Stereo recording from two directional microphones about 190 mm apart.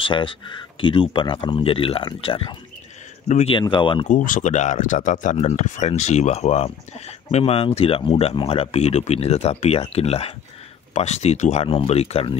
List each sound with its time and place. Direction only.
0.0 s speech: 25° left (ahead or behind)
3.5 s speech: 25° left (ahead or behind)
4.1 s speech: 45° left (ahead or behind)